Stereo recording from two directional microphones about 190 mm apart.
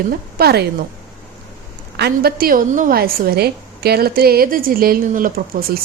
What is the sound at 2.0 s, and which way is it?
A woman's voice, 55° right (ahead or behind).